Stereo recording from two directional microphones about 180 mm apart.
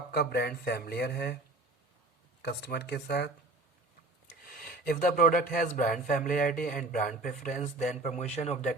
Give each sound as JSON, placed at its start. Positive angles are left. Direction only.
{"t": 0.1, "sound": "speech", "side_deg": 60}
{"t": 2.4, "sound": "speech", "side_deg": 65}
{"t": 4.4, "sound": "a man's voice", "side_deg": 50}